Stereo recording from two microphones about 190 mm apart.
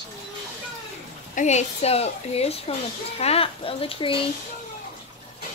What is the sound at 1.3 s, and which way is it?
A woman's voice, 35° left (ahead or behind).